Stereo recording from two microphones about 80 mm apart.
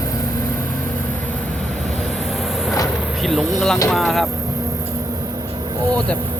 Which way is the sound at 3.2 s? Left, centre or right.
Centre.